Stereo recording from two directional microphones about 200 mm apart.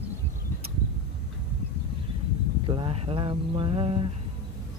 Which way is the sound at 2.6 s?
25° right (ahead or behind).